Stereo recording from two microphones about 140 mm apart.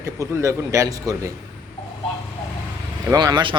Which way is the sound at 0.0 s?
20° right (ahead or behind).